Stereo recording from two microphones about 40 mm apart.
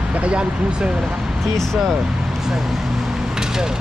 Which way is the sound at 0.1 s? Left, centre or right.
Right.